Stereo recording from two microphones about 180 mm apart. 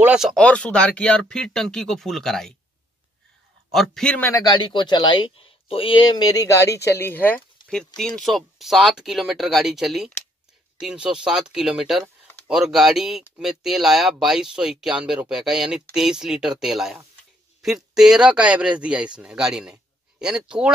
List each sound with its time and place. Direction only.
0.0 s speech: 5° right (ahead or behind)
3.7 s speech: centre (ahead or behind)
4.5 s a man's voice: 25° left (ahead or behind); by 20.7 s 5° right (ahead or behind)